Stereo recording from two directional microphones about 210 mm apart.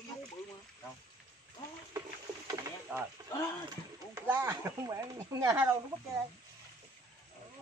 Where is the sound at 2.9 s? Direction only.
10° right (ahead or behind).